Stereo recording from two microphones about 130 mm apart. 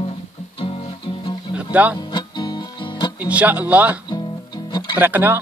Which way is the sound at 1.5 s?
10° right (ahead or behind).